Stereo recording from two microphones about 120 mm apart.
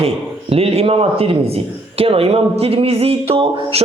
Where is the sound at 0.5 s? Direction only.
60° right (ahead or behind).